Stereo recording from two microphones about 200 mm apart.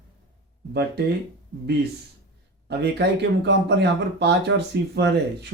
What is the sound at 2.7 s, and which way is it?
Speech, 55° right (ahead or behind).